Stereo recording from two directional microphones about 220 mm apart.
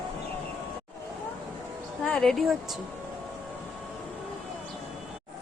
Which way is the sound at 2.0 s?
5° left (ahead or behind).